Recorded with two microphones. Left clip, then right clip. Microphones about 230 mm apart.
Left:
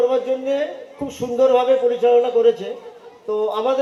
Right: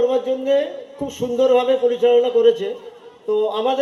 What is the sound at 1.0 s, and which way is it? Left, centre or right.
A man's voice, right.